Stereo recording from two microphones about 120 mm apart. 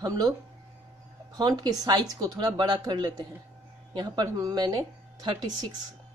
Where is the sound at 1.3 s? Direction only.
35° right (ahead or behind).